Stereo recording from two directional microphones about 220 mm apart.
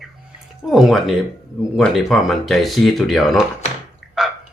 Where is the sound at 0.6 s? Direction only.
Centre (ahead or behind).